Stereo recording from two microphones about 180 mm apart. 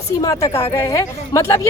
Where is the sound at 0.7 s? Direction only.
20° left (ahead or behind).